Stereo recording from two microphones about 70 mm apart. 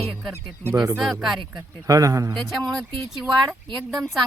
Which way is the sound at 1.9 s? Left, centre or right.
Right.